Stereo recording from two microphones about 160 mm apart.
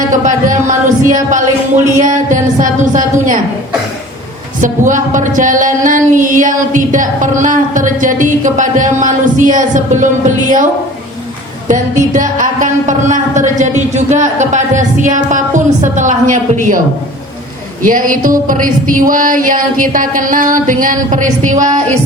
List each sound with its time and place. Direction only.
0.1 s music: 55° right (ahead or behind)
2.0 s speech: 50° right (ahead or behind)
4.6 s speech: 55° right (ahead or behind)
11.7 s speech: 50° right (ahead or behind)
17.8 s a sound: 55° right (ahead or behind)